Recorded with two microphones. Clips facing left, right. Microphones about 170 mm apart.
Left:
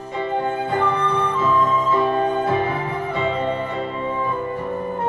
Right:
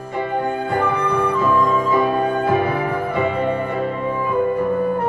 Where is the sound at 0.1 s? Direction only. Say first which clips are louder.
Right 1 dB; 10° right (ahead or behind).